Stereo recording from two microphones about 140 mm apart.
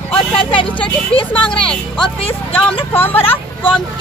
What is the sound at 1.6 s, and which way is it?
Speech, 5° left (ahead or behind).